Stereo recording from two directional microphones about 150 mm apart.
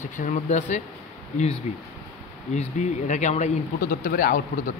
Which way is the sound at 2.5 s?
50° left (ahead or behind).